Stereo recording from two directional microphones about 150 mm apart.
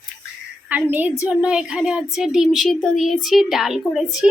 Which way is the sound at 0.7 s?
10° right (ahead or behind).